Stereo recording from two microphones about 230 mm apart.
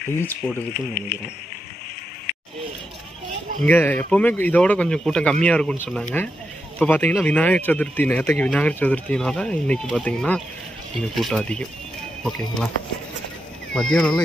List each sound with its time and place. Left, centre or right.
0.2 s speech: centre
3.6 s speech: centre
13.7 s speech: centre